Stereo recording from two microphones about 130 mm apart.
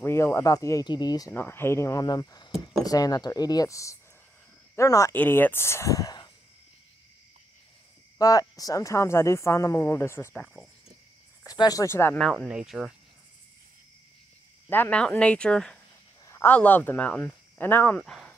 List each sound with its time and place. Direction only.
0.0 s speech: 20° left (ahead or behind)
1.3 s speech: 15° left (ahead or behind)
5.1 s speech: 15° left (ahead or behind); by 6.3 s 30° left (ahead or behind)
8.2 s speech: 30° left (ahead or behind)
10.3 s speech: 5° left (ahead or behind)
11.4 s speech: 30° left (ahead or behind)
12.2 s speech: 5° left (ahead or behind)
14.7 s speech: 10° left (ahead or behind)
16.3 s a sound: 20° left (ahead or behind)
16.5 s speech: 15° left (ahead or behind)